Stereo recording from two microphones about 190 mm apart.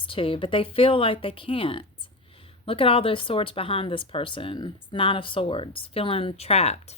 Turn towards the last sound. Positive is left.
turn(degrees=35)  # may be behind; listen again after turning